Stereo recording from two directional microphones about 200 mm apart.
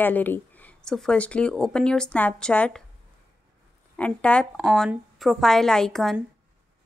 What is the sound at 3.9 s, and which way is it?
Speech, 5° left (ahead or behind).